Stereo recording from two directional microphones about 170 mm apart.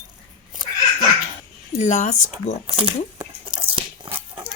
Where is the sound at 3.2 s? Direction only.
30° right (ahead or behind).